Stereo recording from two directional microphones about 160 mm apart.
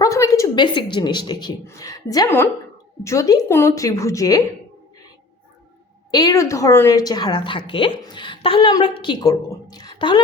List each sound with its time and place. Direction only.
0.0 s a woman's voice: 20° left (ahead or behind)
6.1 s a woman's voice: 25° left (ahead or behind)